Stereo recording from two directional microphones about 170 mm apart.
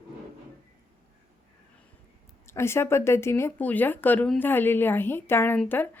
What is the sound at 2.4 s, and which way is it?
Speech, 15° left (ahead or behind).